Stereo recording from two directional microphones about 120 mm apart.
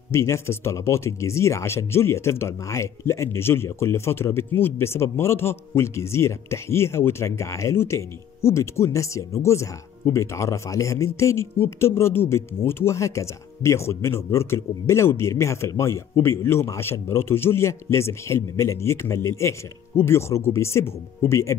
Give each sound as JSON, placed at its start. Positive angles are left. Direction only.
{"t": 0.1, "sound": "speech", "side_deg": 20}